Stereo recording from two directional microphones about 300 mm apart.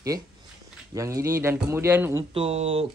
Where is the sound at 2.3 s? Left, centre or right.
Centre.